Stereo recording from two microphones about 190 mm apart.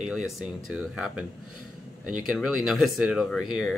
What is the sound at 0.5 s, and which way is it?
Speech, 5° right (ahead or behind).